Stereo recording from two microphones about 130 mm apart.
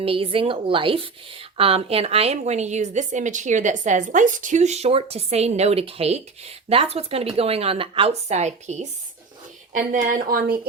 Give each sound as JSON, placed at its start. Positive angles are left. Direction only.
{"t": 0.0, "sound": "a woman's voice", "side_deg": -45}
{"t": 9.9, "sound": "speech", "side_deg": -90}